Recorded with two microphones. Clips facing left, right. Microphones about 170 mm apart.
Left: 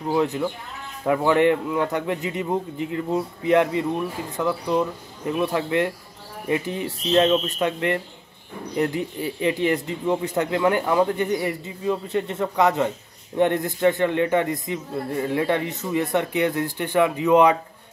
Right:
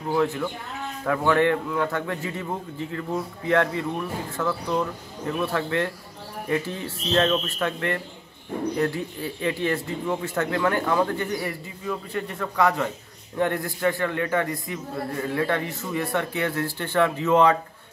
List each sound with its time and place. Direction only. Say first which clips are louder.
0.1 s a man's voice: left 1 dB; 20° left (ahead or behind)